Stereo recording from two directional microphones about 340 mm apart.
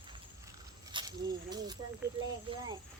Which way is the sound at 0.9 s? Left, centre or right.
Centre.